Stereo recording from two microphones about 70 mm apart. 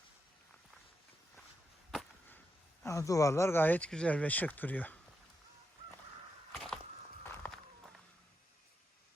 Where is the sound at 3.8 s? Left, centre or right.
Centre.